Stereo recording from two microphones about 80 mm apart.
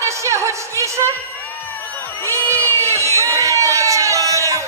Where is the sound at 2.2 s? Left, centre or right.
Left.